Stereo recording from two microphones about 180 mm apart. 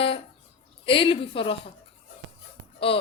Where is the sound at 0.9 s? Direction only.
30° left (ahead or behind).